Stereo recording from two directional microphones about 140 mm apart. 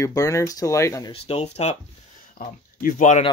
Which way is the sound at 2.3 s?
70° left (ahead or behind).